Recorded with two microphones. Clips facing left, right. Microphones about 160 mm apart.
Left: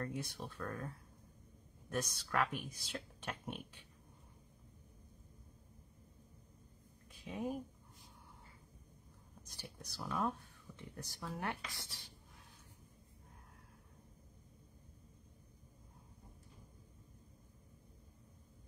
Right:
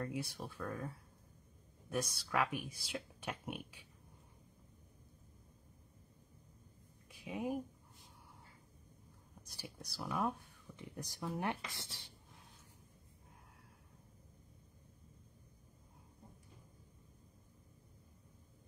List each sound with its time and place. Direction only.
0.0 s speech: 10° right (ahead or behind)
7.1 s a sound: 10° right (ahead or behind)
9.4 s speech: 10° right (ahead or behind)
10.8 s speech: 15° right (ahead or behind)